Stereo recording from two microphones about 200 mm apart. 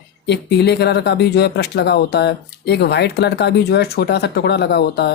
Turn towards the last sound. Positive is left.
turn(degrees=55)  # may be behind; listen again after turning